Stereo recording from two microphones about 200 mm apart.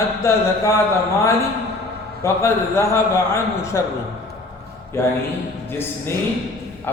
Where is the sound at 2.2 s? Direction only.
15° left (ahead or behind).